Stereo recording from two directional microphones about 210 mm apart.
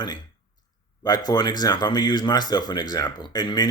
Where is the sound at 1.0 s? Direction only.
20° left (ahead or behind).